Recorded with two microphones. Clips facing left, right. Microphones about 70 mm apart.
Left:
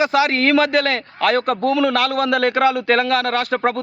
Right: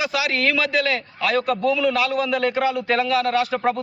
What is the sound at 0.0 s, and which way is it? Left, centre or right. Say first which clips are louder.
A man's voice: left 6 dB; left.